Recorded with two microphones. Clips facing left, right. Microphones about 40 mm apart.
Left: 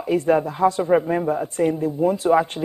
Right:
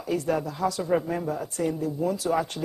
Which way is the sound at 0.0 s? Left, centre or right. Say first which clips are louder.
Left 8 dB; left.